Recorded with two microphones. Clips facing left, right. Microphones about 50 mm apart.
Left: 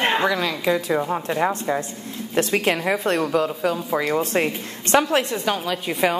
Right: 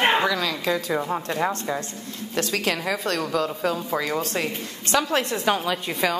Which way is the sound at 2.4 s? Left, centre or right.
Left.